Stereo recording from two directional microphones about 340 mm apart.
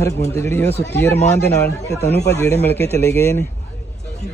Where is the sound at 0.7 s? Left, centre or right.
Left.